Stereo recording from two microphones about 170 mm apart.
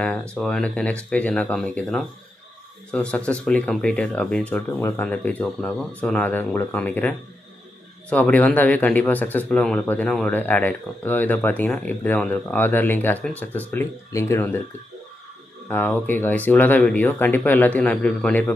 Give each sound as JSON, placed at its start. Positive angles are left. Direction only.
{"t": 0.0, "sound": "speech", "side_deg": 5}
{"t": 15.7, "sound": "speech", "side_deg": 10}